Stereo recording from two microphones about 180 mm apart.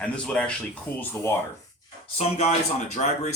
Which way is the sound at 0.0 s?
5° left (ahead or behind).